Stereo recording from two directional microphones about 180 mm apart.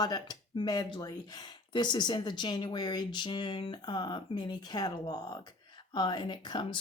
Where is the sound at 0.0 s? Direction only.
20° left (ahead or behind).